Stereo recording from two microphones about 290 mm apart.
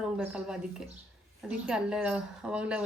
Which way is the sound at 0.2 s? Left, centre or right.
Centre.